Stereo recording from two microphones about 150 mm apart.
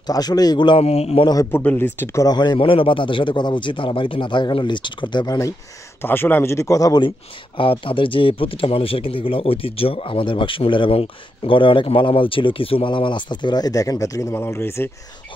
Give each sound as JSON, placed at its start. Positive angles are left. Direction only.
{"t": 0.0, "sound": "speech", "side_deg": 25}
{"t": 1.2, "sound": "speech", "side_deg": 20}
{"t": 1.6, "sound": "speech", "side_deg": 10}
{"t": 2.2, "sound": "speech", "side_deg": 30}
{"t": 6.0, "sound": "speech", "side_deg": 15}
{"t": 7.5, "sound": "speech", "side_deg": 35}